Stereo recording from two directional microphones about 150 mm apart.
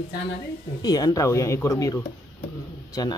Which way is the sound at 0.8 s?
25° left (ahead or behind).